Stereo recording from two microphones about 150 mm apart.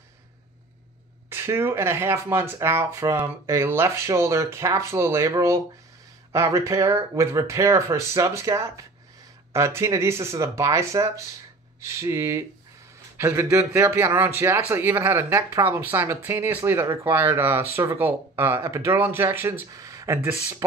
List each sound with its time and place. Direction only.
1.3 s speech: 15° right (ahead or behind)